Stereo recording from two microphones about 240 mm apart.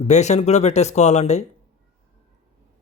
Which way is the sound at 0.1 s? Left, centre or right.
Left.